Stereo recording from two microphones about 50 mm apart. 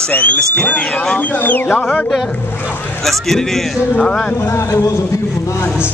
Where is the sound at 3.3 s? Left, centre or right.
Centre.